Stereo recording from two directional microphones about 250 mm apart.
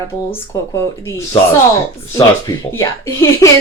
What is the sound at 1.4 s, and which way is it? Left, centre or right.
Speech, left.